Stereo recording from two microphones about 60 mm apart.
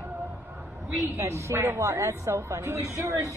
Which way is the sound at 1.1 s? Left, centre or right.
Right.